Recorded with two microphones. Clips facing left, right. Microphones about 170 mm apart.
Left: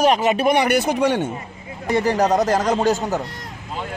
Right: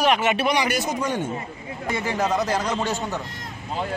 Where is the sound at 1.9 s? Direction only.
40° left (ahead or behind).